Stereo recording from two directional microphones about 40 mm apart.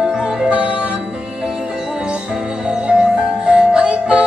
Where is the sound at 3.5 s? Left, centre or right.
Right.